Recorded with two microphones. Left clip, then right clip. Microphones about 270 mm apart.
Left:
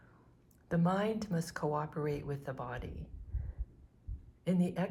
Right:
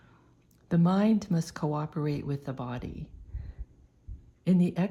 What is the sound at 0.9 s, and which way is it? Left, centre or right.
Speech, right.